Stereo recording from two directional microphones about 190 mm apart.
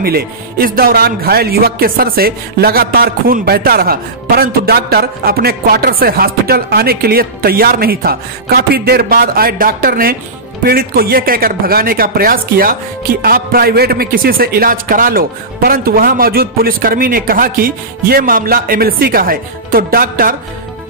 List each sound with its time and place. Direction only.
0.0 s speech: 55° right (ahead or behind)